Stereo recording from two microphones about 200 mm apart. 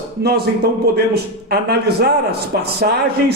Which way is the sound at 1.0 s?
55° right (ahead or behind).